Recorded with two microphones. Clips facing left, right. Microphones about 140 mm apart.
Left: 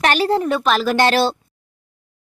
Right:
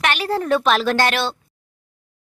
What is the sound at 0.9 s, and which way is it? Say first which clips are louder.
Speech: left 4 dB; 30° left (ahead or behind).